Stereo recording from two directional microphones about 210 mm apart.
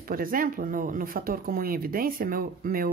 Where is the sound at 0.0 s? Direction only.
45° right (ahead or behind).